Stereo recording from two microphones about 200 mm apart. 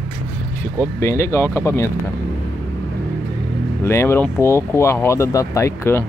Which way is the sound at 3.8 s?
15° left (ahead or behind).